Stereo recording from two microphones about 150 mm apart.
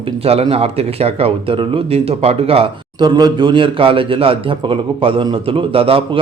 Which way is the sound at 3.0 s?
30° right (ahead or behind).